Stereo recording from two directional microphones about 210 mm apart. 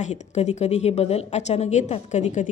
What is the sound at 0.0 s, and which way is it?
A woman's voice, 35° left (ahead or behind).